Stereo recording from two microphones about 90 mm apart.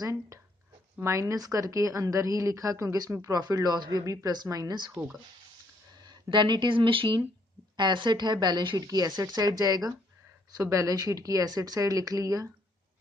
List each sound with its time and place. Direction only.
0.0 s a woman's voice: 35° right (ahead or behind)
6.2 s speech: 55° right (ahead or behind); by 7.2 s 75° right (ahead or behind)
7.7 s a woman's voice: 60° right (ahead or behind); by 12.4 s 40° right (ahead or behind)